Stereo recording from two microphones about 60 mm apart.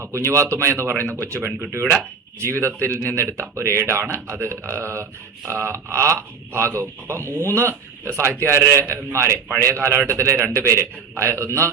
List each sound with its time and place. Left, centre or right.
0.0 s speech: right
1.7 s speech: right
2.4 s speech: right